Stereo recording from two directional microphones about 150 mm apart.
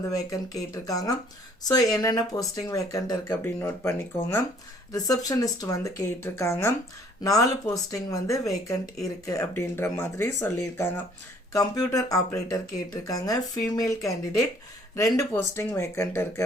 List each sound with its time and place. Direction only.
0.3 s speech: 25° left (ahead or behind)